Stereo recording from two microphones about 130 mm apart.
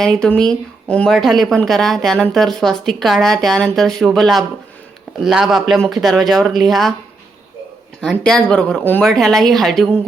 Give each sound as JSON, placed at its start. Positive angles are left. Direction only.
{"t": 0.0, "sound": "a woman's voice", "side_deg": 5}
{"t": 8.1, "sound": "a woman's voice", "side_deg": 5}